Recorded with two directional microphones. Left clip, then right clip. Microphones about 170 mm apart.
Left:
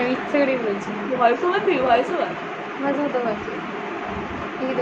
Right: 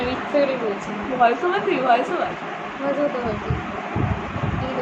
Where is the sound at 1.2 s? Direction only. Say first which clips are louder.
Even; centre (ahead or behind).